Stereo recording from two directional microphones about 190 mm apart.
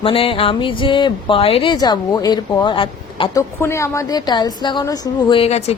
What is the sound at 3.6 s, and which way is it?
A woman's voice, 15° left (ahead or behind).